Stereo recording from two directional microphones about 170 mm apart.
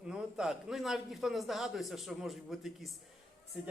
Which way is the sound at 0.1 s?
Centre (ahead or behind).